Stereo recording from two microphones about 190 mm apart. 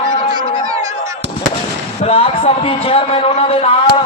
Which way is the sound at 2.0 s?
30° left (ahead or behind).